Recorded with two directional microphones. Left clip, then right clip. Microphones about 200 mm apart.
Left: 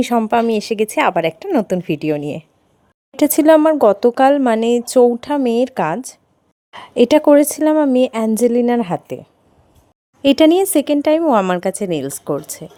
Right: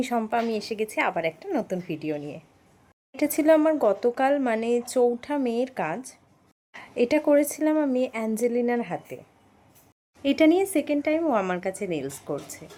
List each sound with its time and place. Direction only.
0.0 s a woman's voice: 50° left (ahead or behind)
10.2 s a woman's voice: 55° left (ahead or behind)